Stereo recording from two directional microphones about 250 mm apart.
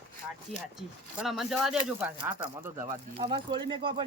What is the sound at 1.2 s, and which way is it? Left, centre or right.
Speech, centre.